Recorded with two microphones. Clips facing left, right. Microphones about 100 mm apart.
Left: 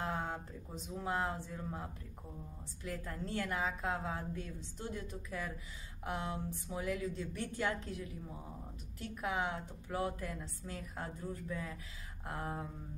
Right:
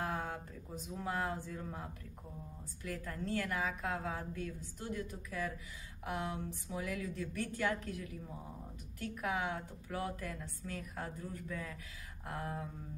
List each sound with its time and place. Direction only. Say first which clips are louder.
0.0 s a sound: even; 25° left (ahead or behind)
0.8 s a woman's voice: left 1 dB; 25° left (ahead or behind)
9.0 s a woman's voice: even; 30° left (ahead or behind)